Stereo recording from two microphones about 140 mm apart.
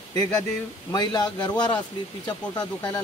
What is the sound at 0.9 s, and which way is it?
A man's voice, 30° left (ahead or behind).